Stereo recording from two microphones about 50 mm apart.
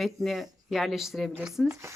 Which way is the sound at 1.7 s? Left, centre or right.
Right.